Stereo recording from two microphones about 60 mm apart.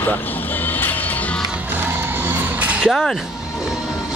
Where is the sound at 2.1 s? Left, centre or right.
Right.